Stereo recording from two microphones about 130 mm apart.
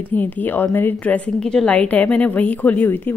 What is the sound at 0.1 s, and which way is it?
Speech, 15° left (ahead or behind).